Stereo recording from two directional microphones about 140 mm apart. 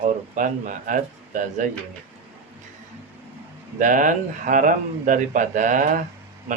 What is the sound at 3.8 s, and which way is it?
A man's voice, 65° right (ahead or behind).